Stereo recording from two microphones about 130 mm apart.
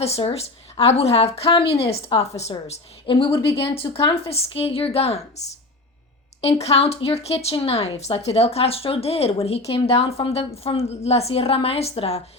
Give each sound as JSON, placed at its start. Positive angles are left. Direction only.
{"t": 0.0, "sound": "speech", "side_deg": 50}
{"t": 3.1, "sound": "speech", "side_deg": 40}